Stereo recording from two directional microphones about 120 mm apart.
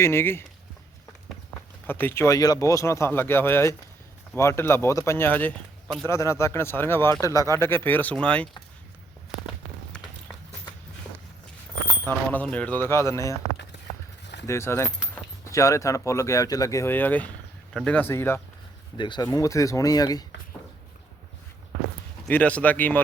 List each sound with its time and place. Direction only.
0.0 s speech: 20° left (ahead or behind)
1.9 s speech: 15° left (ahead or behind)
12.0 s speech: 15° left (ahead or behind)
14.4 s speech: 25° left (ahead or behind)
18.9 s speech: 40° left (ahead or behind)
22.3 s speech: 15° left (ahead or behind)